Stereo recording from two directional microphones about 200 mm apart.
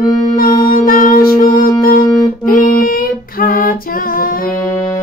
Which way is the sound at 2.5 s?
45° left (ahead or behind).